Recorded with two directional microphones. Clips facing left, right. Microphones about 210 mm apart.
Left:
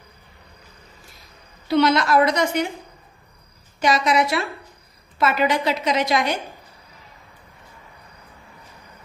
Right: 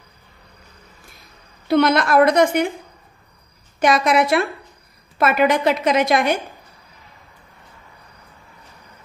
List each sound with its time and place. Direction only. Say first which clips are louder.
1.7 s a woman's voice: right 2 dB; 50° right (ahead or behind)
3.8 s a woman's voice: right 3 dB; 55° right (ahead or behind)